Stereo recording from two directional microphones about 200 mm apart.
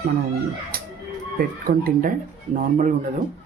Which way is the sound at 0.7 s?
50° right (ahead or behind).